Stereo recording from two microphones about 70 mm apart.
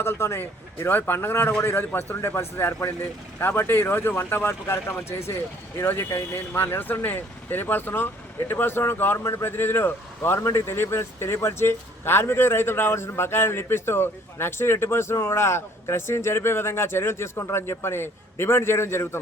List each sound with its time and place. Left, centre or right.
0.0 s a man's voice: left